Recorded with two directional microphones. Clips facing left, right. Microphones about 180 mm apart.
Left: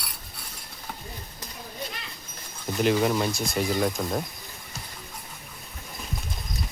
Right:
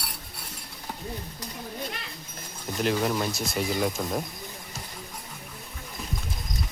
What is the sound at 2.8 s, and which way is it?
A man's voice, 5° left (ahead or behind).